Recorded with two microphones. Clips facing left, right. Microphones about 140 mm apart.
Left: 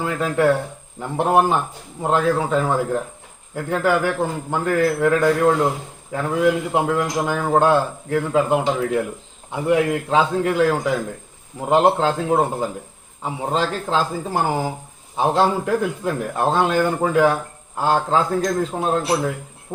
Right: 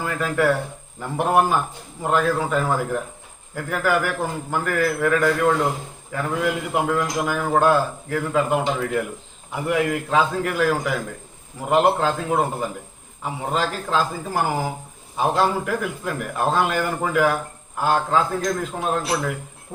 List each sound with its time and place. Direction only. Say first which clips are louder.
0.0 s a man's voice: left 3 dB; 20° left (ahead or behind)